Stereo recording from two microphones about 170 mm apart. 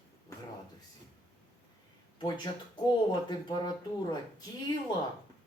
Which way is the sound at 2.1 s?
25° left (ahead or behind).